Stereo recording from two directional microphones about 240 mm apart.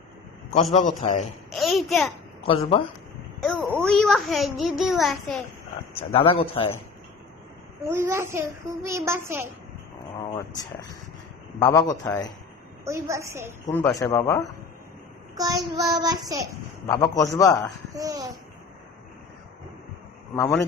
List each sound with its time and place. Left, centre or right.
0.7 s a man's voice: left
1.5 s a child's voice: centre
2.5 s a man's voice: left
3.4 s a child's voice: centre
6.1 s a man's voice: left
7.9 s a child's voice: centre
10.2 s speech: centre
12.8 s a child's voice: centre
13.7 s speech: centre
15.4 s a child's voice: centre
16.9 s speech: centre
17.9 s a child's voice: centre
20.3 s speech: centre